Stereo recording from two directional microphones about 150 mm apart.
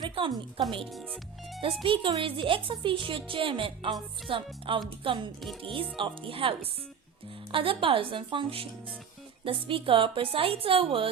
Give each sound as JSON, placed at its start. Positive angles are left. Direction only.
{"t": 0.0, "sound": "speech", "side_deg": -35}
{"t": 0.9, "sound": "speech", "side_deg": 0}
{"t": 1.6, "sound": "speech", "side_deg": -35}